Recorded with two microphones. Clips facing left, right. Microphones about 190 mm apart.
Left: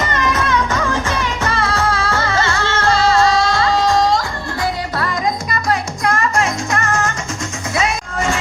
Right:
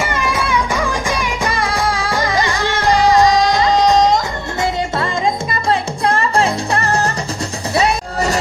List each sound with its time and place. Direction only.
0.0 s music: 10° right (ahead or behind); by 8.4 s 35° right (ahead or behind)